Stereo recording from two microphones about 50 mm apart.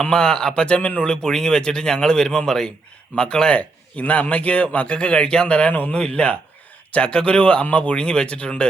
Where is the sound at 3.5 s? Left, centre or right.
Left.